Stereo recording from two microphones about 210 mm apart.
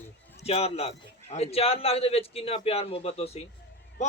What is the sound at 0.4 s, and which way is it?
A man's voice, 30° left (ahead or behind).